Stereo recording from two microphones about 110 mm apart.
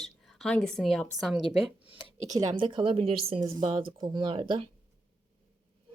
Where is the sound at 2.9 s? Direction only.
60° right (ahead or behind).